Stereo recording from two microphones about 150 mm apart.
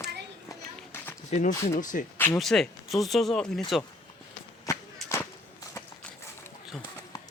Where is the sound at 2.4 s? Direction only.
Centre (ahead or behind).